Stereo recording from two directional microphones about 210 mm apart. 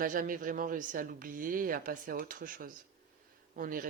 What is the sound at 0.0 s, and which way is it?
Speech, 40° right (ahead or behind).